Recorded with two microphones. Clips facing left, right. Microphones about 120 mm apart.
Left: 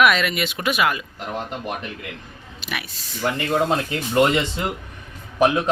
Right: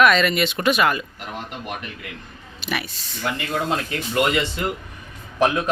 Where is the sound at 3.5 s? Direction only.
30° left (ahead or behind).